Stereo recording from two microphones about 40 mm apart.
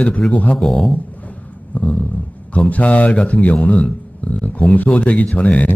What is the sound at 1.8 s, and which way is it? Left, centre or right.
Speech, left.